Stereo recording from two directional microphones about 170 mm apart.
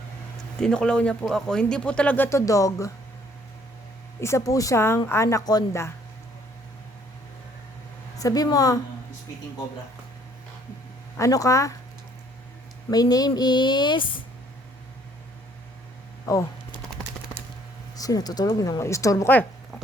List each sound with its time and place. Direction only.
0.6 s speech: 5° left (ahead or behind)
4.2 s speech: 15° left (ahead or behind)
8.2 s speech: 20° left (ahead or behind)
11.2 s speech: 20° left (ahead or behind)
12.9 s speech: 20° left (ahead or behind)
16.2 s speech: 20° left (ahead or behind)
17.9 s speech: 20° left (ahead or behind)